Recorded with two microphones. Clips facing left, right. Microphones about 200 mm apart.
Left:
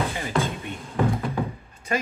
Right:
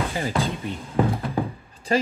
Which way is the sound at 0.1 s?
30° right (ahead or behind).